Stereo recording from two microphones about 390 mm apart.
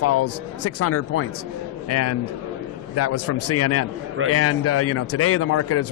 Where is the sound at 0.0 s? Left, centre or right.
Left.